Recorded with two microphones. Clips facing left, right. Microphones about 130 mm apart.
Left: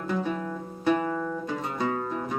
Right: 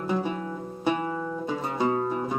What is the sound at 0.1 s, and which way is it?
Music, 20° right (ahead or behind).